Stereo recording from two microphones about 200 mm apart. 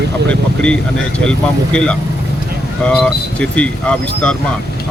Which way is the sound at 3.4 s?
5° left (ahead or behind).